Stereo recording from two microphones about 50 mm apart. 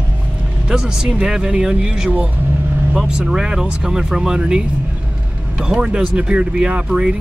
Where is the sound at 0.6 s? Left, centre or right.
Centre.